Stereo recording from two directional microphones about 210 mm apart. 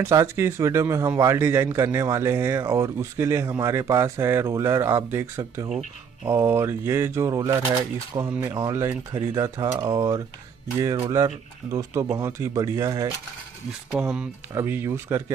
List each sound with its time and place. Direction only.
0.0 s speech: 15° right (ahead or behind)